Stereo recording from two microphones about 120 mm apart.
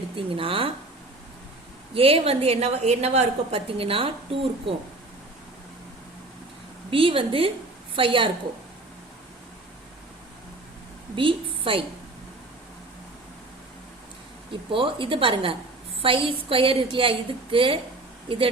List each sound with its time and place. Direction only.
0.2 s a woman's voice: 50° right (ahead or behind)
1.9 s a woman's voice: 50° right (ahead or behind)
6.9 s a woman's voice: 50° right (ahead or behind)
11.1 s a woman's voice: 45° right (ahead or behind)
14.7 s a woman's voice: 45° right (ahead or behind)